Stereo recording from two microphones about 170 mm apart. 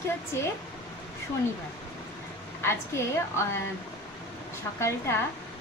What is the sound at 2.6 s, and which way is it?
Speech, 15° left (ahead or behind).